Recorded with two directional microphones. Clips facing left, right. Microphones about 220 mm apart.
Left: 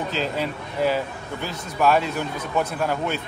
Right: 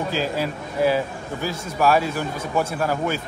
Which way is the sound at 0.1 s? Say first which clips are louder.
Right 2 dB; 5° right (ahead or behind).